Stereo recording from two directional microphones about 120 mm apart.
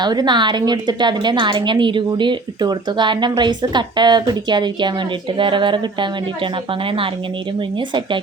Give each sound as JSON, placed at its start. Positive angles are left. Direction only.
{"t": 0.0, "sound": "a woman's voice", "side_deg": -35}